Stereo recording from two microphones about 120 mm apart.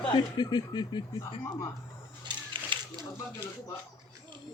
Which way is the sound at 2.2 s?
40° right (ahead or behind).